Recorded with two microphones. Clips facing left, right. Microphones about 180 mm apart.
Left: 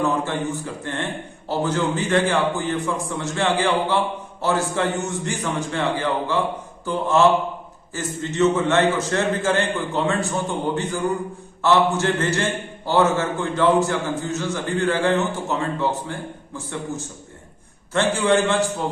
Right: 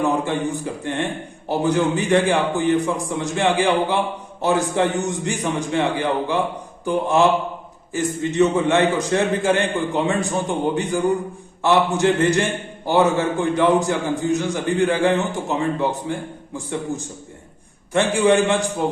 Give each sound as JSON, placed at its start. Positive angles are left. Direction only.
{"t": 0.0, "sound": "a man's voice", "side_deg": -15}
{"t": 17.9, "sound": "a man's voice", "side_deg": -15}